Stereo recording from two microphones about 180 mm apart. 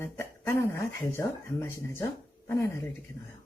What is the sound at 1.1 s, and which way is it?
Speech, 10° left (ahead or behind).